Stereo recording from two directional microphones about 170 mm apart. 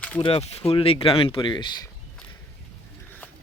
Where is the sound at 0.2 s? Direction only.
35° left (ahead or behind).